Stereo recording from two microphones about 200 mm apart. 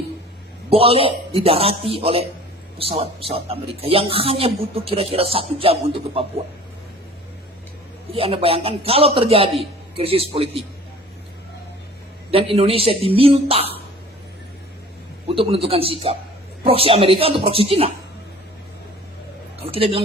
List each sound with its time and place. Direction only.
0.7 s a man's voice: 30° right (ahead or behind)
8.1 s a man's voice: 30° right (ahead or behind)
12.3 s a man's voice: 30° right (ahead or behind)
15.4 s a man's voice: 30° right (ahead or behind)
19.6 s speech: 30° right (ahead or behind)